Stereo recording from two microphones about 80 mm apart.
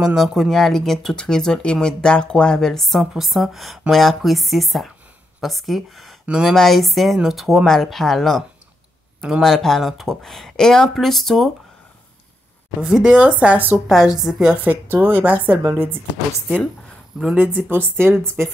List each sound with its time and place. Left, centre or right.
0.0 s speech: centre
6.2 s speech: centre
6.5 s speech: centre
12.8 s speech: centre
13.8 s speech: centre
14.5 s speech: right
17.6 s speech: right